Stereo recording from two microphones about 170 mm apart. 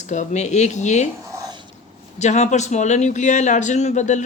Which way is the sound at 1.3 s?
15° right (ahead or behind).